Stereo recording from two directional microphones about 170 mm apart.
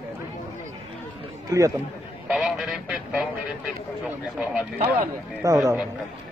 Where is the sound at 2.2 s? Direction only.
Centre (ahead or behind).